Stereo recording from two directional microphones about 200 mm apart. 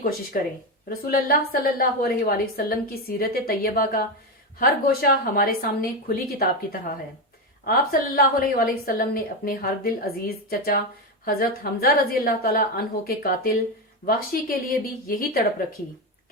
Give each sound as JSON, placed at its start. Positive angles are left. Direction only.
{"t": 0.3, "sound": "a woman's voice", "side_deg": 45}